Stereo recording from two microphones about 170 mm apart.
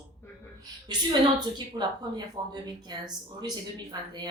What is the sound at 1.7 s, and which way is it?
A woman's voice, 25° right (ahead or behind).